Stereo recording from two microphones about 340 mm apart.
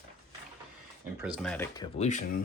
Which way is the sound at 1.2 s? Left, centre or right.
Centre.